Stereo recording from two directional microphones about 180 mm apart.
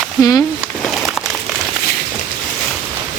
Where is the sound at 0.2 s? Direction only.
20° left (ahead or behind).